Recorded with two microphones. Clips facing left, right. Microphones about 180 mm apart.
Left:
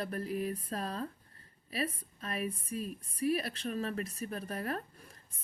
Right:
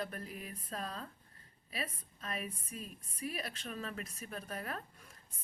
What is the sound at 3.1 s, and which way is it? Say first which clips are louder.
A woman's voice: left 10 dB; 35° left (ahead or behind).